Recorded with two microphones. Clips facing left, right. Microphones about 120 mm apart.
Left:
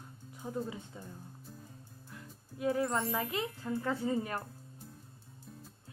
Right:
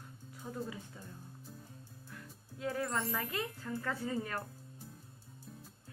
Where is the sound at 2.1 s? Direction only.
20° left (ahead or behind).